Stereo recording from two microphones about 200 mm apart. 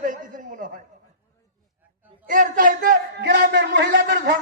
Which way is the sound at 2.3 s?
40° right (ahead or behind).